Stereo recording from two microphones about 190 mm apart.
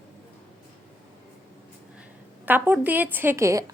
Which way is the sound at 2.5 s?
10° right (ahead or behind).